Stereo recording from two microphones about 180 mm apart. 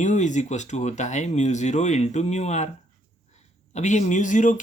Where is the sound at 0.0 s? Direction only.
45° left (ahead or behind).